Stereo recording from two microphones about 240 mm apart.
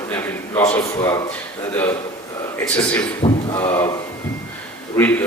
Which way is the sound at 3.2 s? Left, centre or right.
Left.